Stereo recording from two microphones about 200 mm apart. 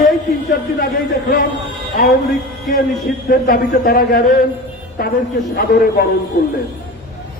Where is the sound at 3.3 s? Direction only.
45° left (ahead or behind).